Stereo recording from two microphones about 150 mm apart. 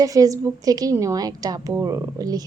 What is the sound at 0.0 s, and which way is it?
A woman's voice, 25° right (ahead or behind).